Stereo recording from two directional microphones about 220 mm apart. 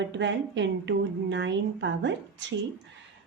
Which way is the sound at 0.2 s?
55° right (ahead or behind).